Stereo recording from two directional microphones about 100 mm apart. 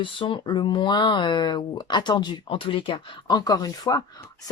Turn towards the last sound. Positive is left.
turn(degrees=40)  # may be behind; listen again after turning